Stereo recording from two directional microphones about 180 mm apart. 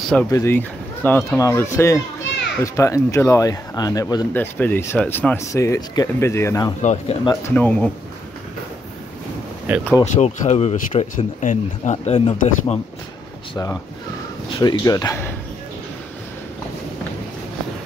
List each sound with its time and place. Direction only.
0.3 s speech: 15° left (ahead or behind)
4.3 s speech: 10° left (ahead or behind)
6.8 s speech: 40° left (ahead or behind)
7.2 s speech: 10° left (ahead or behind)
9.7 s speech: 10° right (ahead or behind)
10.0 s speech: 45° left (ahead or behind)
14.6 s speech: 20° left (ahead or behind)